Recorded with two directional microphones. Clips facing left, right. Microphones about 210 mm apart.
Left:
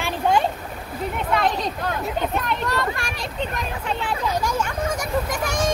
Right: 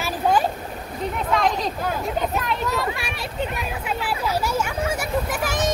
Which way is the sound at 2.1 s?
Centre (ahead or behind).